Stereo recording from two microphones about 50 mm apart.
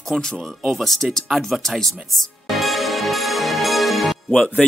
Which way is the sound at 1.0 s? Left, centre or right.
Centre.